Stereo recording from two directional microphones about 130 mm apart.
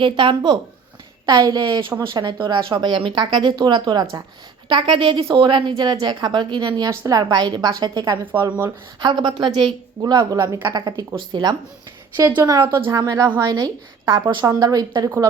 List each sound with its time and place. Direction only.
0.0 s a woman's voice: 40° right (ahead or behind)